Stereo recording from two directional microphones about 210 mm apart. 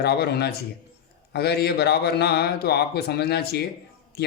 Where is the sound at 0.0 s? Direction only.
50° left (ahead or behind).